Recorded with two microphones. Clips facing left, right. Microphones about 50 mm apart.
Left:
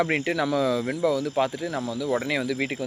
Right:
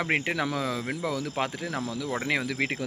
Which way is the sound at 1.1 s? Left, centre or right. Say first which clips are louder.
Left 6 dB; right.